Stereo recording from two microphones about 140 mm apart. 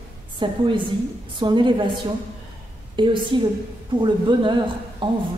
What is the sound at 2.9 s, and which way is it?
Speech, 35° right (ahead or behind).